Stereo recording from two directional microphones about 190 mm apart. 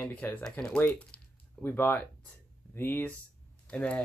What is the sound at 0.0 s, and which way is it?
Speech, 10° left (ahead or behind).